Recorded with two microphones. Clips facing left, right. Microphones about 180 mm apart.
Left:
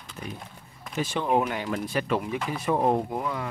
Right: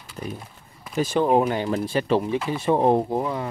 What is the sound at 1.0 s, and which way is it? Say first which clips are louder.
Speech: right 6 dB; 40° right (ahead or behind).